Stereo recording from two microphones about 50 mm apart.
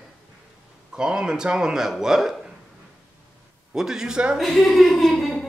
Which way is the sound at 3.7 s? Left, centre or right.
Centre.